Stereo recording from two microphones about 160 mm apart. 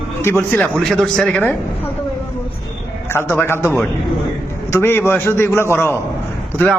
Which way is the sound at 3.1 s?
15° left (ahead or behind).